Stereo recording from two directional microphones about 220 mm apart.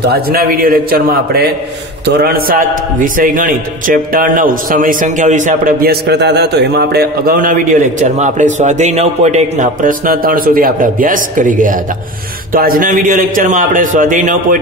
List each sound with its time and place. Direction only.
0.1 s a man's voice: 40° right (ahead or behind)